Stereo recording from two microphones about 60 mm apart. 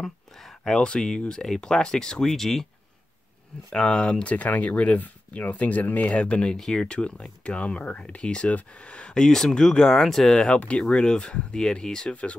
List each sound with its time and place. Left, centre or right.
0.0 s speech: centre
3.7 s speech: centre